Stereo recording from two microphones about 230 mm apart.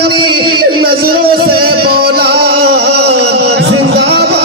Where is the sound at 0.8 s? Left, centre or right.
Right.